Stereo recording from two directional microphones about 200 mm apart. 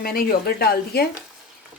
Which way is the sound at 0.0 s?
50° left (ahead or behind).